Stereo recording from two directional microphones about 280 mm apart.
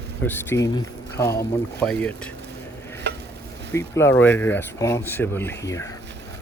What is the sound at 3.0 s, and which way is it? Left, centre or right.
Stir, right.